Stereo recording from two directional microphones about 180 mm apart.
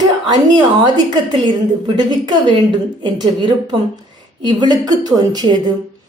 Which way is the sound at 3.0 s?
25° right (ahead or behind).